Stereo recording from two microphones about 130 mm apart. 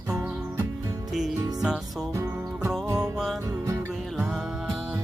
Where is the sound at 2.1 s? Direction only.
20° right (ahead or behind).